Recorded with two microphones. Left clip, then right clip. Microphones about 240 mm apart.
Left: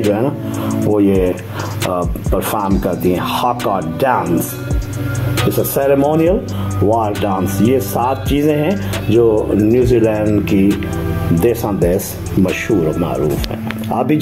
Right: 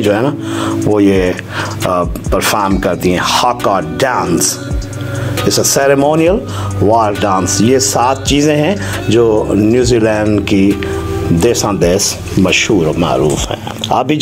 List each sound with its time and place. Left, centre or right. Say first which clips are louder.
0.1 s speech: right 4 dB; right
5.8 s speech: right 2 dB; right
7.9 s speech: right 5 dB; right
8.3 s speech: right 4 dB; right